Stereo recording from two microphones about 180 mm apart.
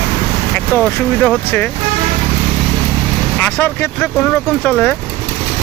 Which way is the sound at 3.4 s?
10° left (ahead or behind).